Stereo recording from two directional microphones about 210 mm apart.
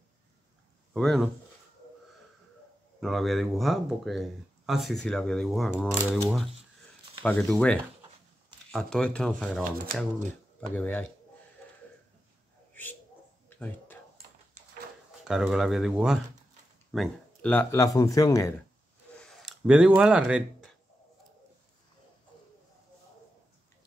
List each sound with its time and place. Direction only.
0.9 s speech: centre (ahead or behind)
3.0 s speech: centre (ahead or behind)
10.7 s speech: 10° left (ahead or behind)
13.5 s a sound: 10° left (ahead or behind)
15.2 s speech: centre (ahead or behind); by 18.5 s 15° left (ahead or behind)
19.1 s a sound: centre (ahead or behind)